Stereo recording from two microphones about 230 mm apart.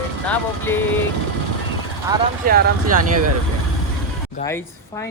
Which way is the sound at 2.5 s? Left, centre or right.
Right.